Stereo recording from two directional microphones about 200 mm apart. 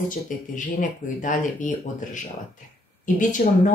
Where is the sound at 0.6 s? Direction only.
40° left (ahead or behind).